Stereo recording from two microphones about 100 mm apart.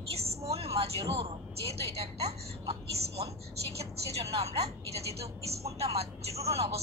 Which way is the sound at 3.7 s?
90° right.